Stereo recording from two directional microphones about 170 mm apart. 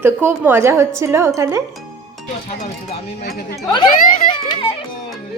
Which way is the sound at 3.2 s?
70° left (ahead or behind).